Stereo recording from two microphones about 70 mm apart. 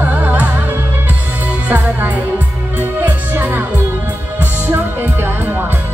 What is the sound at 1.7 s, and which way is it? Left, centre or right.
Music, right.